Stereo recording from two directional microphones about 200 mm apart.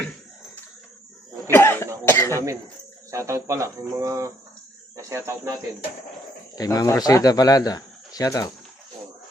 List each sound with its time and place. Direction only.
1.5 s cough: 10° left (ahead or behind)
3.1 s speech: 15° right (ahead or behind)
6.6 s speech: 15° left (ahead or behind)